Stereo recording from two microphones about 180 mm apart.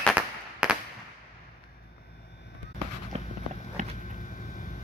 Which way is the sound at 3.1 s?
35° right (ahead or behind).